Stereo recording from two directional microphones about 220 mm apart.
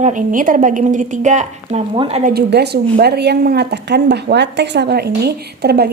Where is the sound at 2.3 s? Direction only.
50° right (ahead or behind).